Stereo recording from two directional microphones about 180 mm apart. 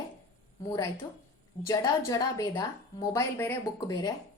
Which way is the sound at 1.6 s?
20° left (ahead or behind).